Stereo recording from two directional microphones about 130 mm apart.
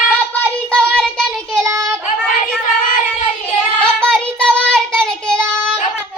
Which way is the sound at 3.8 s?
5° left (ahead or behind).